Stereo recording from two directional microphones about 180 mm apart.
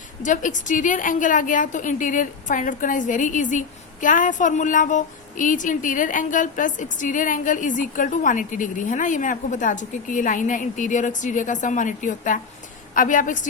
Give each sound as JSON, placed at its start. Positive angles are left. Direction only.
{"t": 0.2, "sound": "a woman's voice", "side_deg": 45}